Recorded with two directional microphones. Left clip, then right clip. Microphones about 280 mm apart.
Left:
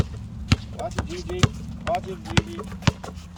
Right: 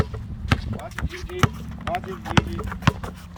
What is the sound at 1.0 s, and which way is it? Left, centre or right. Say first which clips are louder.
Speech: right 3 dB; centre.